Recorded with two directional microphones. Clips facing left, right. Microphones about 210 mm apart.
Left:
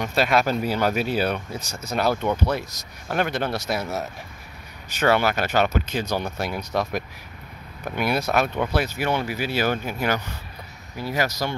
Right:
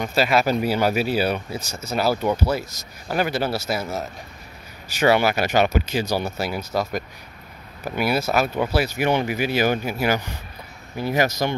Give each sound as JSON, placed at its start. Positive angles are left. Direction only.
{"t": 0.0, "sound": "speech", "side_deg": -5}
{"t": 4.8, "sound": "speech", "side_deg": -10}
{"t": 11.0, "sound": "speech", "side_deg": -25}